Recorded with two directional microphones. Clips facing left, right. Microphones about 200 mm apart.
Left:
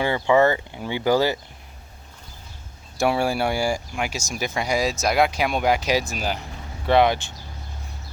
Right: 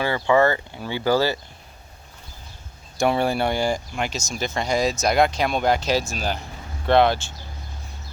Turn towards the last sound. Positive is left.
turn(degrees=15)  # may be behind; listen again after turning